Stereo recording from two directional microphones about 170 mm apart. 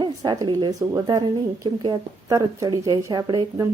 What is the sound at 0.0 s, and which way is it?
Speech, 25° right (ahead or behind).